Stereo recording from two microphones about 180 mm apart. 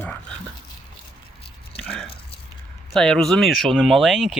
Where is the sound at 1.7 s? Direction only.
30° left (ahead or behind).